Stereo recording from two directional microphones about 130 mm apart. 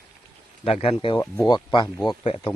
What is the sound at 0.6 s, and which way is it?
Speech, 45° left (ahead or behind).